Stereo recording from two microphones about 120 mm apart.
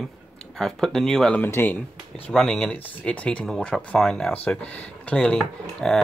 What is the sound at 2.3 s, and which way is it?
Speech, 5° left (ahead or behind).